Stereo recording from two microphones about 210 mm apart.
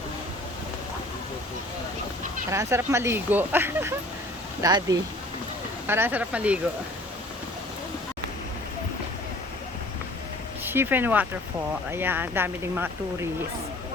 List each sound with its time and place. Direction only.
2.5 s speech: 15° right (ahead or behind)
10.6 s speech: 10° right (ahead or behind)